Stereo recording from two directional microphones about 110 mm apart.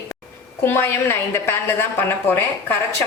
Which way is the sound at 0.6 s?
20° left (ahead or behind).